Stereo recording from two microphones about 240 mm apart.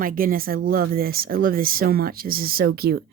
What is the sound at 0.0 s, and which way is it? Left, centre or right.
Speech, right.